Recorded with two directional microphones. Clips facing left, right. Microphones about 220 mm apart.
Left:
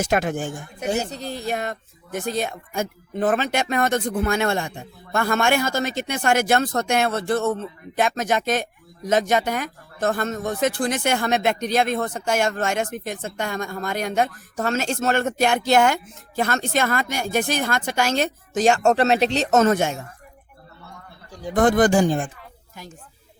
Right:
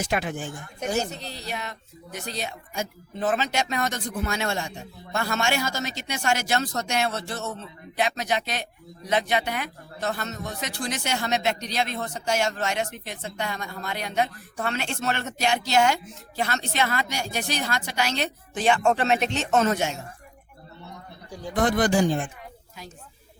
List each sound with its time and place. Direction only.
0.0 s speech: 45° left (ahead or behind)
20.8 s a sound: 20° right (ahead or behind)
21.5 s speech: 50° left (ahead or behind)